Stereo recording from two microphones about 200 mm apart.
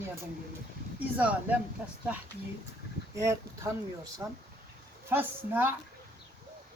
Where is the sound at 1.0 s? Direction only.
10° right (ahead or behind).